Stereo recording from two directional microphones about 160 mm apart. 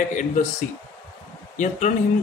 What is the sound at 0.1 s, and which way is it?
Speech, 50° left (ahead or behind).